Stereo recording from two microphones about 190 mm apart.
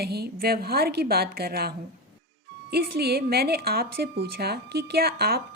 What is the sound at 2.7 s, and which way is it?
A woman's voice, 55° right (ahead or behind).